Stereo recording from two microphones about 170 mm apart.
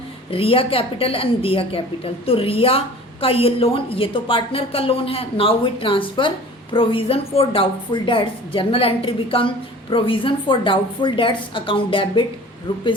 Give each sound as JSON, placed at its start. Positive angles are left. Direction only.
{"t": 0.3, "sound": "a woman's voice", "side_deg": 35}